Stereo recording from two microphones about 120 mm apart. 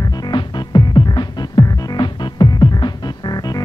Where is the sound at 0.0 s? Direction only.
35° left (ahead or behind).